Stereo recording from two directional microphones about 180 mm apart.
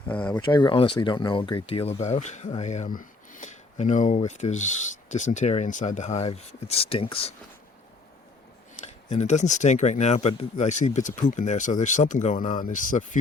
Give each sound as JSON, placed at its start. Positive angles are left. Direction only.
{"t": 0.1, "sound": "speech", "side_deg": 10}
{"t": 0.5, "sound": "speech", "side_deg": 25}
{"t": 8.8, "sound": "speech", "side_deg": 40}